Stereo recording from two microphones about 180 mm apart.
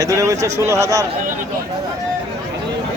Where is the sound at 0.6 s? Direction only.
15° right (ahead or behind).